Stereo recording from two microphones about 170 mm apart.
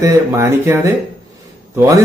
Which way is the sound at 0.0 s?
15° right (ahead or behind).